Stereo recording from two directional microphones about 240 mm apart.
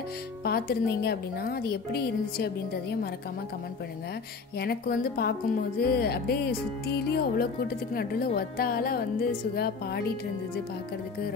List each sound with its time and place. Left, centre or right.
0.4 s speech: left
4.6 s speech: left